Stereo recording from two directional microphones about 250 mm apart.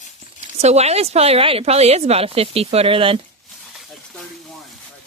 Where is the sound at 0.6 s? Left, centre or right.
Right.